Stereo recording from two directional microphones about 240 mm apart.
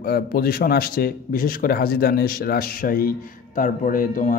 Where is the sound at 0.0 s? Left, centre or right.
Left.